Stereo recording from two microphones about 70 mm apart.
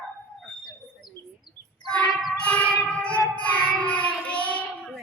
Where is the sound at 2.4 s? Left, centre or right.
Centre.